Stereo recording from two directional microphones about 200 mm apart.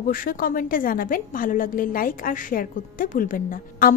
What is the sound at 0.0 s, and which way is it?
A woman's voice, 45° left (ahead or behind).